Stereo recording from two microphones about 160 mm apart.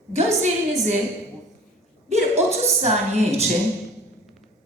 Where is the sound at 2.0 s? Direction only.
40° right (ahead or behind).